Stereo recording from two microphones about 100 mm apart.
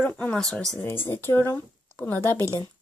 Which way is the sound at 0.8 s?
20° left (ahead or behind).